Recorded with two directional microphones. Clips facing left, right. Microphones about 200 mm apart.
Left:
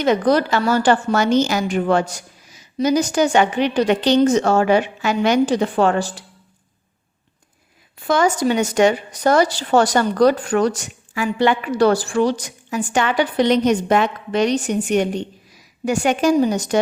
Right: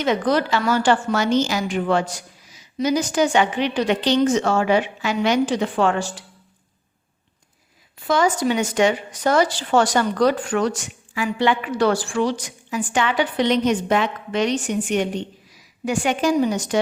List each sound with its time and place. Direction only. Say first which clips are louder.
0.0 s a woman's voice: left 4 dB; 45° left (ahead or behind)
7.9 s a woman's voice: left 2 dB; 50° left (ahead or behind)